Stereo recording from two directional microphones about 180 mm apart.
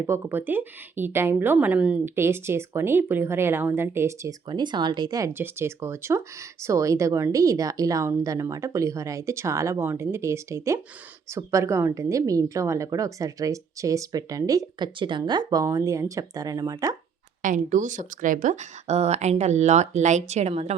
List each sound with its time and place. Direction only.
0.0 s a woman's voice: 15° right (ahead or behind)
17.4 s speech: 45° right (ahead or behind)